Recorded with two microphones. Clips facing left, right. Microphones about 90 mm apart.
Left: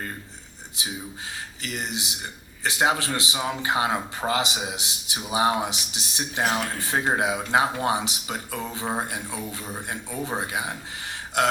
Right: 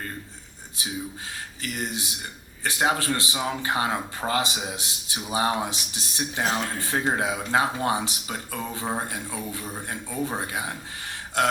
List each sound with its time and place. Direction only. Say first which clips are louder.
0.8 s a man's voice: right 1 dB; 20° left (ahead or behind)